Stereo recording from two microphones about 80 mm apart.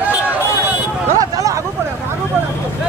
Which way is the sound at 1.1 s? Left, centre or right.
Right.